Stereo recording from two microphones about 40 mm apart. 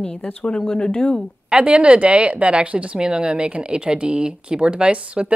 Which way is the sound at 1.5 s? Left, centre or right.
Right.